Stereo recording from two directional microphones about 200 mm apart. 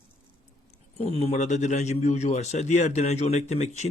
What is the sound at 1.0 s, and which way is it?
Speech, 30° left (ahead or behind).